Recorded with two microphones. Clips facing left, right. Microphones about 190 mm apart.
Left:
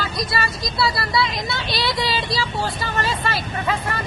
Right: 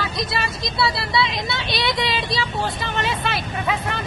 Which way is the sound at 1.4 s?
20° right (ahead or behind).